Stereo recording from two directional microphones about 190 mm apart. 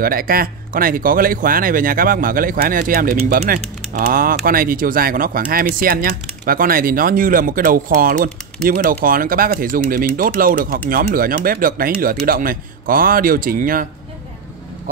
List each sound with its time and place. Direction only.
0.0 s speech: 50° right (ahead or behind)